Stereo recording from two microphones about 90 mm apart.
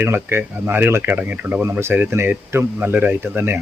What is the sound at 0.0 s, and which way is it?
Speech, 25° right (ahead or behind).